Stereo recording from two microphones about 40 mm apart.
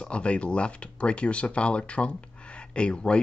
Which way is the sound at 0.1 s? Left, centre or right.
Left.